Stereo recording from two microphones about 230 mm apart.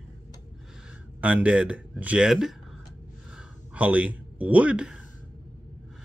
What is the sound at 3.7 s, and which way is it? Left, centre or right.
Speech, centre.